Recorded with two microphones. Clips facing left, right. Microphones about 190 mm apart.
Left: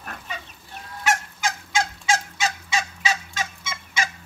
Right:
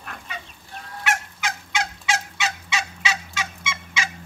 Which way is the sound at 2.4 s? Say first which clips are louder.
Left 2 dB; 45° left (ahead or behind).